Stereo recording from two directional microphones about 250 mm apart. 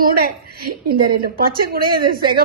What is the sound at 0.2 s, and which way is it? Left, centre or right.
A woman's voice, right.